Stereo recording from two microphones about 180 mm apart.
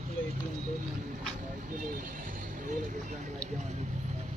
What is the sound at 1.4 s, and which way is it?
Vehicle, 45° right (ahead or behind).